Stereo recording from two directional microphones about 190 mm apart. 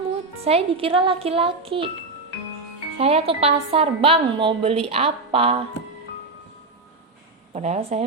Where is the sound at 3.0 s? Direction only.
30° right (ahead or behind).